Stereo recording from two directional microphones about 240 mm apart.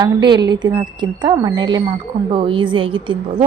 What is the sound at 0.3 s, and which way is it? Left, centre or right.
A woman's voice, centre.